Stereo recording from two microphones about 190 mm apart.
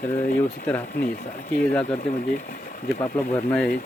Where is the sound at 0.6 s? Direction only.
10° left (ahead or behind).